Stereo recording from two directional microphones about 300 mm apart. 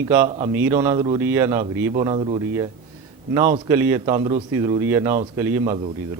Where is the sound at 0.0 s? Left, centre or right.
Centre.